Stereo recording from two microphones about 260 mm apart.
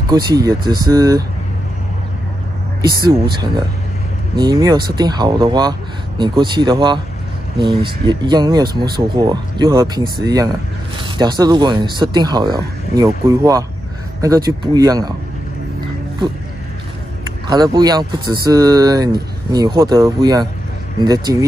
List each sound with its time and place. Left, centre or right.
0.1 s speech: centre
3.1 s speech: centre
17.5 s speech: centre